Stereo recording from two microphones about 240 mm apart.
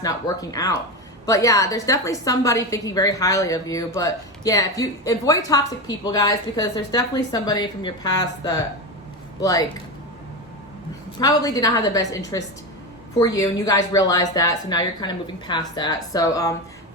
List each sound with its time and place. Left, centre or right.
0.0 s a woman's voice: centre
11.2 s a woman's voice: centre